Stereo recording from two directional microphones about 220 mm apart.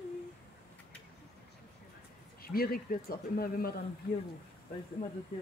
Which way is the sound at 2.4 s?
45° left (ahead or behind).